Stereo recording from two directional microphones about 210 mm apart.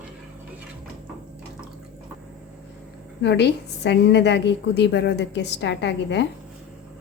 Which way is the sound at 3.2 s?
55° left (ahead or behind).